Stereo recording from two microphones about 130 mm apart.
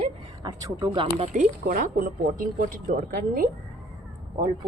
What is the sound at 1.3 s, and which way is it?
Speech, 80° right.